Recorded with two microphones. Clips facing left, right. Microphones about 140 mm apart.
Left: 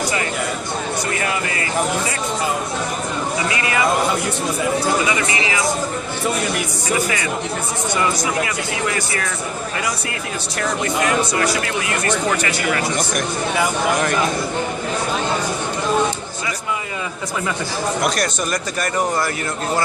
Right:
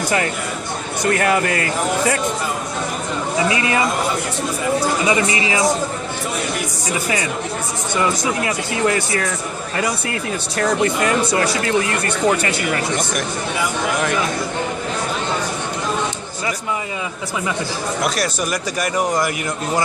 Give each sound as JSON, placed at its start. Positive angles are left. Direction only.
{"t": 1.1, "sound": "speech", "side_deg": -55}
{"t": 5.0, "sound": "speech", "side_deg": -30}
{"t": 10.6, "sound": "speech", "side_deg": -35}
{"t": 18.0, "sound": "speech", "side_deg": -5}